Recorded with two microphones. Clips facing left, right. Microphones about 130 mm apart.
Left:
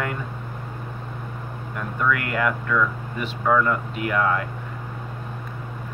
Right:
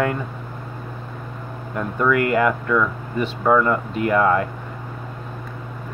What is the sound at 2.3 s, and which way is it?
Speech, 5° right (ahead or behind).